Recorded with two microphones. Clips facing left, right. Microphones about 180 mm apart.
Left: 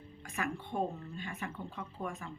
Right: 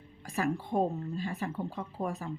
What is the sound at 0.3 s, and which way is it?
Speech, 35° right (ahead or behind).